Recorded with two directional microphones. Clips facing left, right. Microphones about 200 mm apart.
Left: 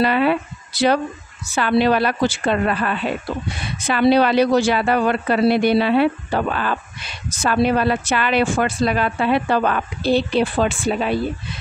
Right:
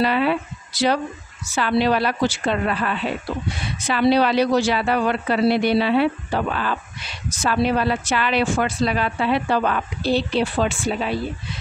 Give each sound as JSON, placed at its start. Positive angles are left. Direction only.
{"t": 0.0, "sound": "speech", "side_deg": 55}